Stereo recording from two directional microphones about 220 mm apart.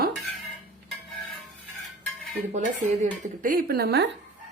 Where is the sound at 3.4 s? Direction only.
40° right (ahead or behind).